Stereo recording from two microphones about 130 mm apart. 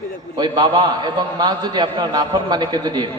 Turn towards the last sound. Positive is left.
turn(degrees=-35)  # may be behind; listen again after turning